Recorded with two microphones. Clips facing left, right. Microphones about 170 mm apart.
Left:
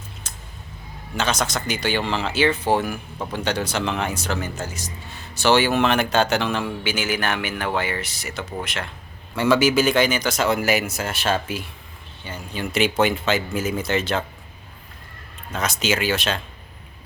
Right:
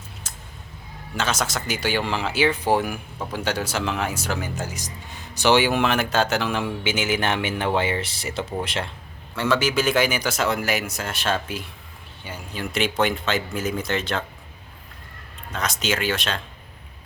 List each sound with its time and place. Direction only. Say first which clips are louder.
0.2 s a sound: left 1 dB; 5° right (ahead or behind)
1.1 s speech: left 2 dB; 5° right (ahead or behind)
6.6 s speech: even; 20° right (ahead or behind)
9.3 s speech: left 4 dB; 10° left (ahead or behind)
12.2 s speech: left 2 dB; 10° right (ahead or behind)
12.7 s speech: left 3 dB; 5° left (ahead or behind)
15.5 s speech: left 2 dB; 5° left (ahead or behind)